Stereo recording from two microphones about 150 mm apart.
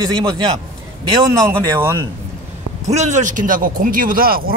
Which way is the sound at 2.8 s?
50° right (ahead or behind).